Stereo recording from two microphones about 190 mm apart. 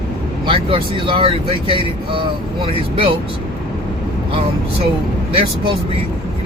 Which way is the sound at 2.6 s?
30° right (ahead or behind).